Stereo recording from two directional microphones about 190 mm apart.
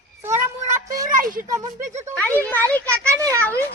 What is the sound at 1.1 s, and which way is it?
Speech, 45° right (ahead or behind).